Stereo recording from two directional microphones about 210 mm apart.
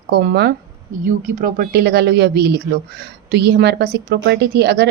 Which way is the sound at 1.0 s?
40° right (ahead or behind).